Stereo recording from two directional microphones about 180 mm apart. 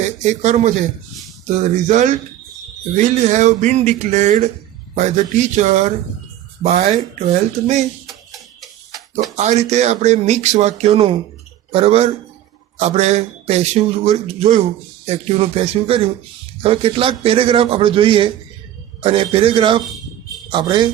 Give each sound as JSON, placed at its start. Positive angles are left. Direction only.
{"t": 0.2, "sound": "speech", "side_deg": -40}
{"t": 8.0, "sound": "music", "side_deg": 0}
{"t": 9.3, "sound": "speech", "side_deg": -40}